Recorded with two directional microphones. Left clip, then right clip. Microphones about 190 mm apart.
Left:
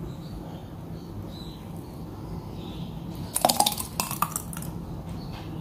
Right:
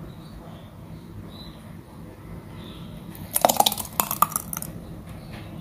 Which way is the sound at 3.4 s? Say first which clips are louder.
Right 3 dB; 15° right (ahead or behind).